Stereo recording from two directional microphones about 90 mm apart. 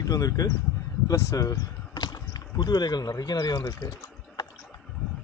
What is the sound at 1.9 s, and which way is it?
Speech, 50° left (ahead or behind).